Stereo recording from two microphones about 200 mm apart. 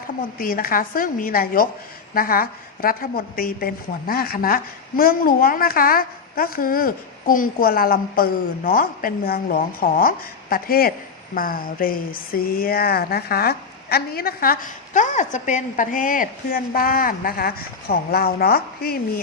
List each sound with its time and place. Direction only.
0.3 s a woman's voice: 45° left (ahead or behind)